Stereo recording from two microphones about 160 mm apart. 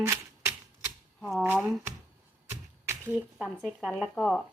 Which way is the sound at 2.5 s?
15° right (ahead or behind).